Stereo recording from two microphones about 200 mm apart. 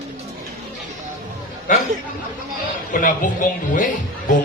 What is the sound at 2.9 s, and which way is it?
Speech, 40° left (ahead or behind).